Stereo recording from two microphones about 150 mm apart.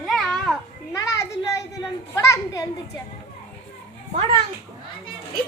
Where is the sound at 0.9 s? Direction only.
20° left (ahead or behind).